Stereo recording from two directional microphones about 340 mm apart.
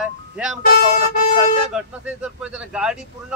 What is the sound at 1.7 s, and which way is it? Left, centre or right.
A man's voice, centre.